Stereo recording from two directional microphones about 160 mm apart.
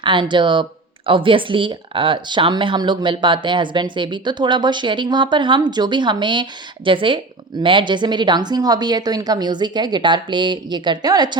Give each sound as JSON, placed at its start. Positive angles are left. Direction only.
{"t": 0.0, "sound": "speech", "side_deg": -30}